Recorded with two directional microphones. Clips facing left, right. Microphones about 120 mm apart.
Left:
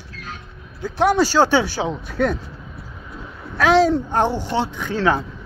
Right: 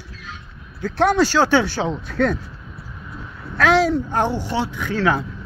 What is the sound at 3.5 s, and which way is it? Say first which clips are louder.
Speech: left 1 dB; 20° left (ahead or behind).